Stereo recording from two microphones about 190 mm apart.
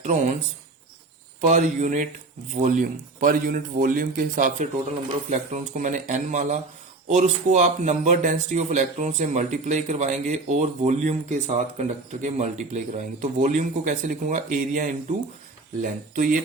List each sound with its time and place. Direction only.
0.0 s speech: 40° right (ahead or behind)
1.4 s speech: 40° right (ahead or behind)